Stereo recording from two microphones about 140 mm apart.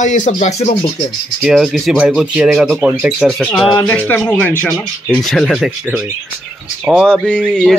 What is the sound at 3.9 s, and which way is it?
Speech, 10° left (ahead or behind).